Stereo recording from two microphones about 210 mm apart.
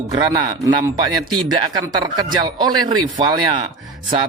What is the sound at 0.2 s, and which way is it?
Speech, 20° right (ahead or behind).